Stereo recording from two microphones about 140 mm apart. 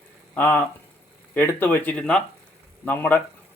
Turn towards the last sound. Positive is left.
turn(degrees=10)  # may be behind; listen again after turning